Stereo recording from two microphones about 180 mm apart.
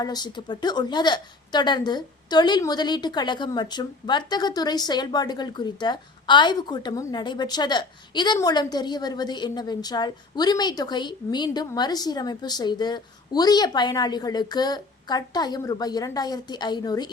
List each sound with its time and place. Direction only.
0.0 s a woman's voice: 25° left (ahead or behind)